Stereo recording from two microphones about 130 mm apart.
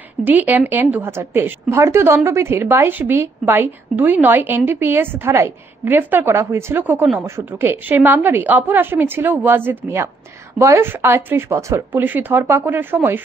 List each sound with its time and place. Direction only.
0.2 s a woman's voice: 15° right (ahead or behind)